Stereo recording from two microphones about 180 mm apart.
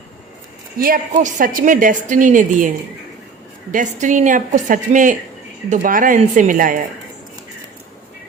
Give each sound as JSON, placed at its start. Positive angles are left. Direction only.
{"t": 0.8, "sound": "a woman's voice", "side_deg": -50}